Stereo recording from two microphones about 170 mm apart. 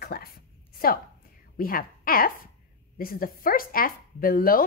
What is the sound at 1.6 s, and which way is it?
A woman's voice, 60° left (ahead or behind).